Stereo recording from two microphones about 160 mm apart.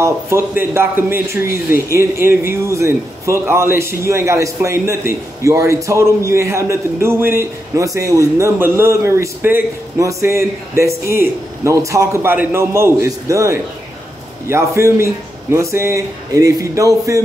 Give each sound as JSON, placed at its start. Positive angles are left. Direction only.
{"t": 0.0, "sound": "speech", "side_deg": -15}